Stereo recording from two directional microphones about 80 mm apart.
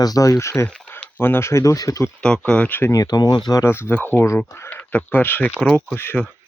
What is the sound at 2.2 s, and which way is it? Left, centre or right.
Speech, centre.